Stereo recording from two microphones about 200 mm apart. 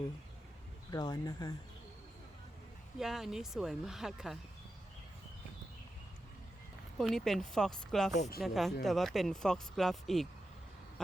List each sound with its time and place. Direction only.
0.9 s speech: 20° left (ahead or behind)
3.0 s speech: centre (ahead or behind)
7.0 s speech: centre (ahead or behind)
8.1 s speech: 35° left (ahead or behind)
8.4 s speech: centre (ahead or behind)